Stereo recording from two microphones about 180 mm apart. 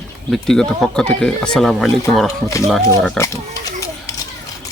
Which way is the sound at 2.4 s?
15° left (ahead or behind).